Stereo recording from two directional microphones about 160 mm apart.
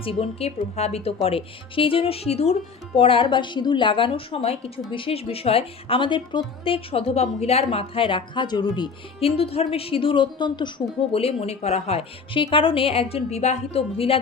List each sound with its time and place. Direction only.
0.0 s a woman's voice: 35° left (ahead or behind)